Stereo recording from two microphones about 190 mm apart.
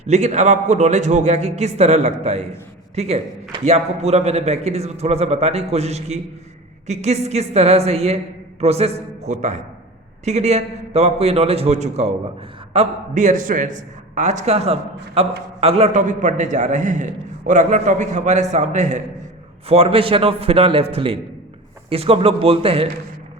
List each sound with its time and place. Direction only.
0.0 s a man's voice: 35° right (ahead or behind)